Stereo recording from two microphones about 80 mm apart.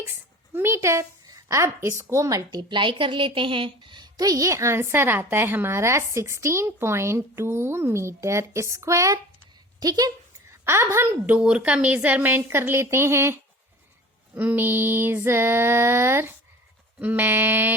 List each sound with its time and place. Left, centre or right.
0.5 s a woman's voice: right
2.6 s a woman's voice: right
9.8 s speech: right
10.6 s a sound: right
10.9 s a woman's voice: right
11.3 s a woman's voice: centre